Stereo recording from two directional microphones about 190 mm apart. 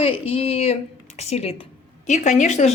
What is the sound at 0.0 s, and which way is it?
Speech, 30° left (ahead or behind).